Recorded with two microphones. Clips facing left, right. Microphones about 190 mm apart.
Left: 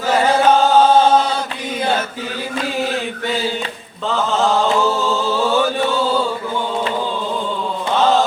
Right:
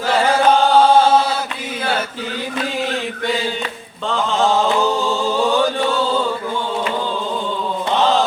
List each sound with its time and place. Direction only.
0.9 s chant: 10° right (ahead or behind)
4.1 s mantra: centre (ahead or behind)
5.0 s music: 15° right (ahead or behind)